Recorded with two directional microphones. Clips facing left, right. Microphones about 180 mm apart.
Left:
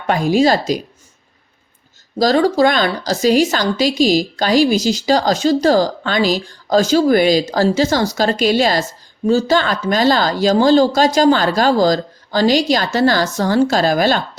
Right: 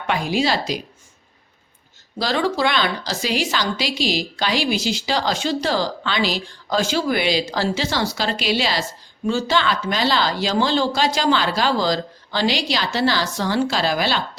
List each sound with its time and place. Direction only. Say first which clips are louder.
0.1 s a woman's voice: left 7 dB; 45° left (ahead or behind)
2.1 s a woman's voice: left 8 dB; 40° left (ahead or behind)